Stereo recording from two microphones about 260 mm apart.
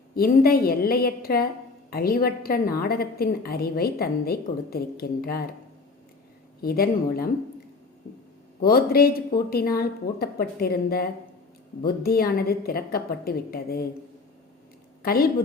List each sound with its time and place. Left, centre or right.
0.2 s a woman's voice: left
6.6 s a woman's voice: left
8.6 s a woman's voice: left
15.0 s a woman's voice: left